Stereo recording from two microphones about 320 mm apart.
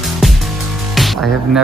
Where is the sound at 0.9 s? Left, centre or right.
Centre.